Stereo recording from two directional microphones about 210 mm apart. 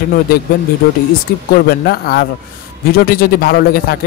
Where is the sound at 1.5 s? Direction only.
45° left (ahead or behind).